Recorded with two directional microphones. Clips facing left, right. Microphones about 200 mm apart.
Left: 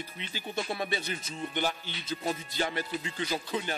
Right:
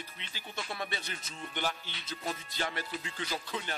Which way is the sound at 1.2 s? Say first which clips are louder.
Left 7 dB; 20° left (ahead or behind).